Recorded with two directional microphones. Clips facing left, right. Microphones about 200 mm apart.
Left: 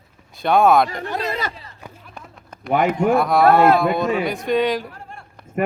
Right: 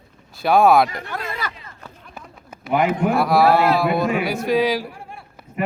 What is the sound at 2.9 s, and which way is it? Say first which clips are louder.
A man's voice: left 1 dB; 5° right (ahead or behind).